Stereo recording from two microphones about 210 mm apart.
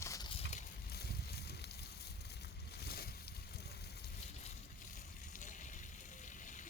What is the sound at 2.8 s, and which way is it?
Boat, 50° left (ahead or behind).